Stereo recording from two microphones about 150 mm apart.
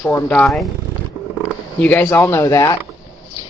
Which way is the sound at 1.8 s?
10° left (ahead or behind).